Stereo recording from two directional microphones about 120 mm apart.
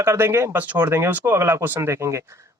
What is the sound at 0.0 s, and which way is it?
A man's voice, 20° right (ahead or behind).